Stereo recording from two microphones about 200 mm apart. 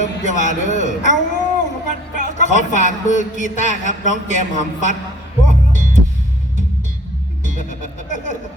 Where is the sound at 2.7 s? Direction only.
35° left (ahead or behind).